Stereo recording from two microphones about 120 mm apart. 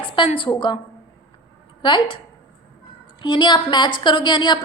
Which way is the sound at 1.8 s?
45° left (ahead or behind).